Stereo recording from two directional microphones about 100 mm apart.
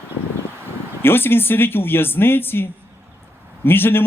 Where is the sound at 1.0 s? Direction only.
20° left (ahead or behind).